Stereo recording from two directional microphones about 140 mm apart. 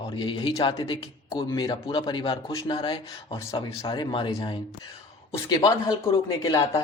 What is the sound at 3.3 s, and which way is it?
Speech, 45° left (ahead or behind).